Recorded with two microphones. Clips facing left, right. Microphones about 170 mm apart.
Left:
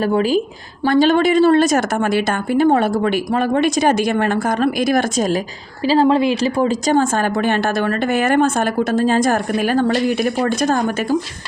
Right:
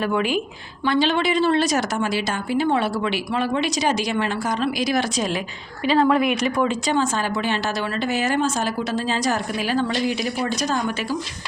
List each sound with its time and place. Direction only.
0.0 s a woman's voice: 35° left (ahead or behind)
5.8 s speech: 30° left (ahead or behind); by 11.2 s 50° left (ahead or behind)